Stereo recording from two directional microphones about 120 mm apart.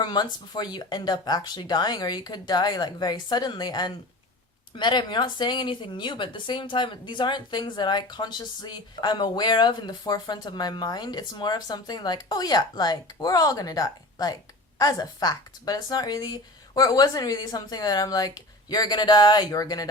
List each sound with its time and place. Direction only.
0.0 s speech: 40° left (ahead or behind)